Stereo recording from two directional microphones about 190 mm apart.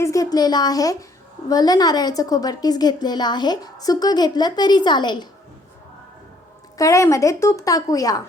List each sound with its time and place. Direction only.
0.0 s a woman's voice: 15° left (ahead or behind)
6.7 s a woman's voice: 15° left (ahead or behind)